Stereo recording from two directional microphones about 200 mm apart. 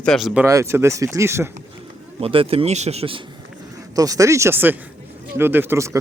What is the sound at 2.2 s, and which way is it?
Speech, 30° right (ahead or behind).